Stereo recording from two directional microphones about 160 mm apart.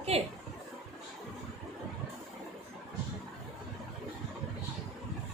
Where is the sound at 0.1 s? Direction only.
40° right (ahead or behind).